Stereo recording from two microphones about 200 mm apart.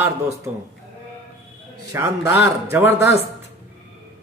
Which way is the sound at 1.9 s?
15° right (ahead or behind).